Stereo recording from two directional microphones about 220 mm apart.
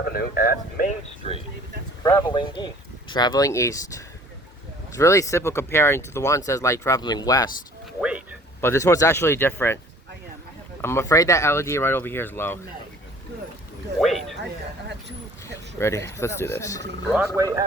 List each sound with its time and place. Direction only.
0.0 s speech: 45° left (ahead or behind)
1.2 s speech: 25° left (ahead or behind)
8.0 s a sound: 5° right (ahead or behind)
8.6 s speech: 10° left (ahead or behind)
10.8 s speech: 10° left (ahead or behind)
14.0 s speech: centre (ahead or behind)
15.8 s speech: 10° left (ahead or behind)
17.2 s speech: 15° right (ahead or behind)